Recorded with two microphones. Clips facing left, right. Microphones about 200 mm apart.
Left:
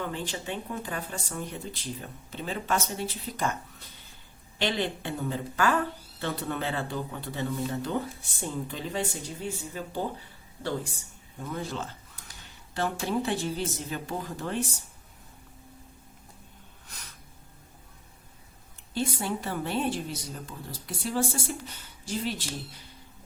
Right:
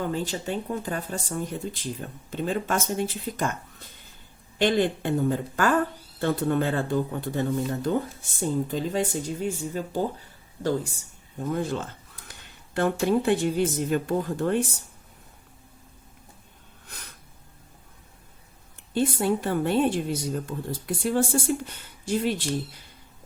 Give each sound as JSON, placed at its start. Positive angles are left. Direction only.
{"t": 0.0, "sound": "speech", "side_deg": -40}
{"t": 18.9, "sound": "speech", "side_deg": -55}